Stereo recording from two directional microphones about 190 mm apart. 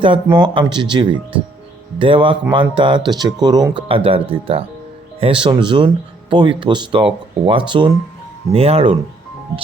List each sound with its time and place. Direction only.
0.0 s speech: 25° right (ahead or behind)